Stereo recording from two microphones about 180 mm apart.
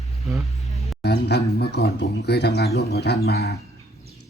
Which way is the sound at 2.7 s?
65° left (ahead or behind).